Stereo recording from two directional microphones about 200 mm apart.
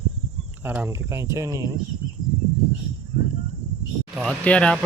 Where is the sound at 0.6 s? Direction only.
10° right (ahead or behind).